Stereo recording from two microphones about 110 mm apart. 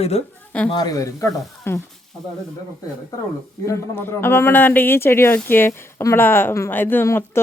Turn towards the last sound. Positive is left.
turn(degrees=20)  # may be behind; listen again after turning